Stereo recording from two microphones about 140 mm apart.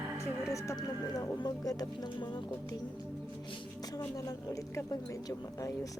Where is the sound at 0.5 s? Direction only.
20° left (ahead or behind).